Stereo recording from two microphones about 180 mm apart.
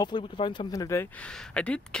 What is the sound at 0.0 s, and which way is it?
Speech, 25° left (ahead or behind).